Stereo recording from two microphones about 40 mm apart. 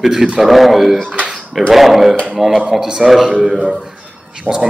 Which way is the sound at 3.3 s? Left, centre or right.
Right.